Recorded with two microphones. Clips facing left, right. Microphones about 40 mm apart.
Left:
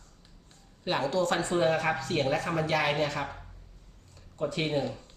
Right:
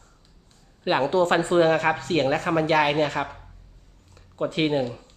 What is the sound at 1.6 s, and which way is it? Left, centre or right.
Speech, right.